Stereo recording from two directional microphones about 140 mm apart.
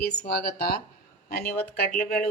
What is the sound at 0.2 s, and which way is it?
Speech, 90° left.